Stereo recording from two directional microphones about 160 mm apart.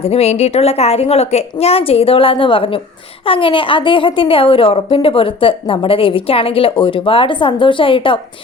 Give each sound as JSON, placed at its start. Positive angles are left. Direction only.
{"t": 0.0, "sound": "a woman's voice", "side_deg": 40}